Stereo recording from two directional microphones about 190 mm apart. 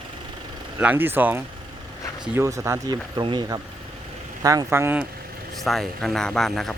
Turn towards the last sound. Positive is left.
turn(degrees=0)  # may be behind; listen again after turning